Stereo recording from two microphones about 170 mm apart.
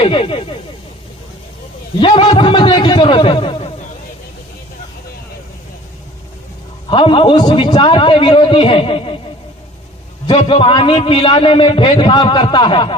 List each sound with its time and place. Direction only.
0.0 s speech: 30° left (ahead or behind)
2.0 s a man's voice: 25° left (ahead or behind)
6.8 s a man's voice: 30° left (ahead or behind)
10.2 s a man's voice: 30° left (ahead or behind)